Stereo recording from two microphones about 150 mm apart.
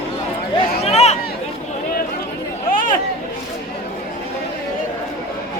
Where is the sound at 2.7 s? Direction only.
70° left (ahead or behind).